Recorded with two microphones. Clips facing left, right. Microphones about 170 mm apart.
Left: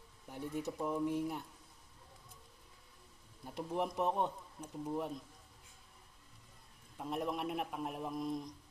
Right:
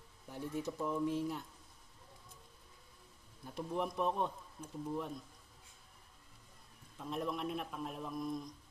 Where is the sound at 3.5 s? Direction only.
15° left (ahead or behind).